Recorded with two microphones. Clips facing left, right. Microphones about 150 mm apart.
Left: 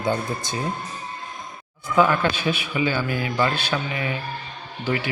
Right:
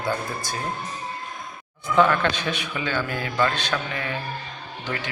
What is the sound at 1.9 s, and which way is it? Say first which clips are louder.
A man's voice: even; 5° left (ahead or behind).